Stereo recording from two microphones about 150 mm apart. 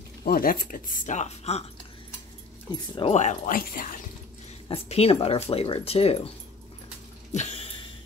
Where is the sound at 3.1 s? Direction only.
50° left (ahead or behind).